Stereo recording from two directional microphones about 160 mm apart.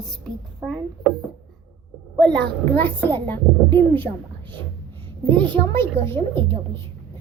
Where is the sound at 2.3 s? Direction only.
10° left (ahead or behind).